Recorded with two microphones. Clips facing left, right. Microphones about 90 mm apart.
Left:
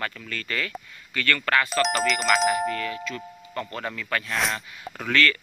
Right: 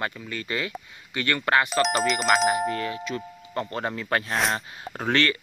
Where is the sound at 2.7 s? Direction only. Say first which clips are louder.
Right 1 dB; 25° right (ahead or behind).